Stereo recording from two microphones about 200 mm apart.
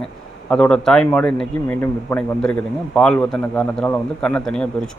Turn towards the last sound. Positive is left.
turn(degrees=5)  # may be behind; listen again after turning